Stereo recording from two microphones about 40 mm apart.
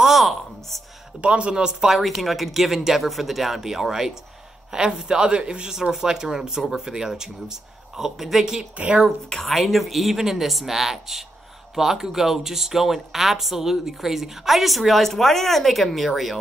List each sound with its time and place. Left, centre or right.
0.0 s a sound: centre
1.2 s speech: right
1.5 s speech: centre
1.9 s speech: centre
4.7 s speech: right; by 8.5 s centre
8.7 s speech: right
9.5 s speech: centre